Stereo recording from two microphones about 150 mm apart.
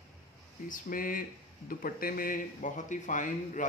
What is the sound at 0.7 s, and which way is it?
A man's voice, 65° left (ahead or behind).